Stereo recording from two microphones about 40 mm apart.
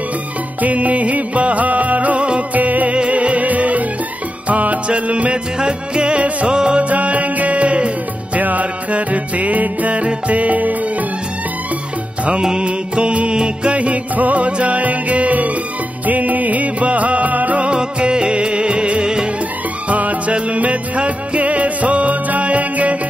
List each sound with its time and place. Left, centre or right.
0.6 s music: right
2.5 s music: right
6.8 s music: right
12.3 s music: right
17.6 s music: right
19.9 s music: right